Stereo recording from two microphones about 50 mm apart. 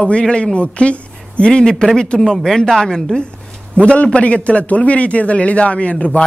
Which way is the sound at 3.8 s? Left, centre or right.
Left.